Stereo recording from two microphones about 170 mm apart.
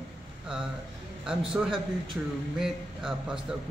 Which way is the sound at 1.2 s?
5° right (ahead or behind).